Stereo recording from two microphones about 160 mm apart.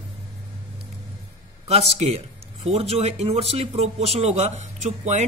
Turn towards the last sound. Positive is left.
turn(degrees=-50)  # may be behind; listen again after turning